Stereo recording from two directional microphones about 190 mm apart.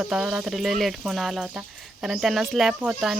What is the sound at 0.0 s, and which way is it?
Speech, 5° right (ahead or behind).